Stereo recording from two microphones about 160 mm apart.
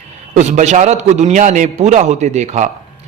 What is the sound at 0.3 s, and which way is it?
A man's voice, 45° right (ahead or behind).